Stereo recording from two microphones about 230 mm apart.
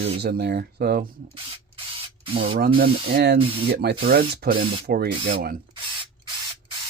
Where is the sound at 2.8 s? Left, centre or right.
Right.